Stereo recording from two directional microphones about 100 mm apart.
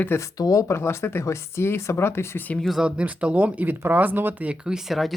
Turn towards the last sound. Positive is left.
turn(degrees=0)  # may be behind; listen again after turning